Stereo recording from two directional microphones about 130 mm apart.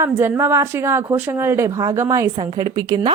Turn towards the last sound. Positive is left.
turn(degrees=-35)  # may be behind; listen again after turning